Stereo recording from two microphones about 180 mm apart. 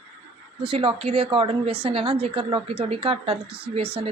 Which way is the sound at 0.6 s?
30° right (ahead or behind).